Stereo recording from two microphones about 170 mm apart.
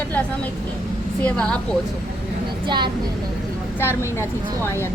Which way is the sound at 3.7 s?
15° left (ahead or behind).